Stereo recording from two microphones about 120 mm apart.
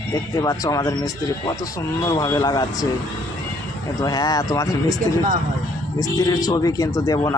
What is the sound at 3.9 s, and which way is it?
Speech, 30° left (ahead or behind).